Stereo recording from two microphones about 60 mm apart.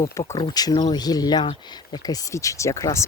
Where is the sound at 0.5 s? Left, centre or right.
Left.